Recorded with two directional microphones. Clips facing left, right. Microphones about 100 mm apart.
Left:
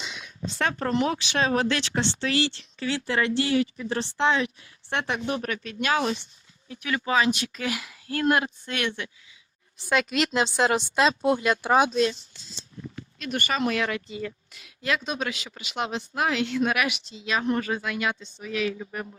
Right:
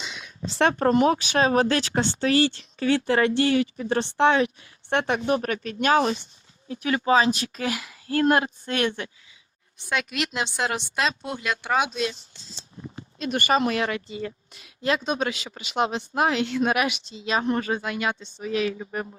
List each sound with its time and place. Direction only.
0.7 s speech: 45° right (ahead or behind)
9.7 s a woman's voice: centre (ahead or behind)
11.3 s speech: 40° left (ahead or behind)
12.3 s speech: 30° right (ahead or behind)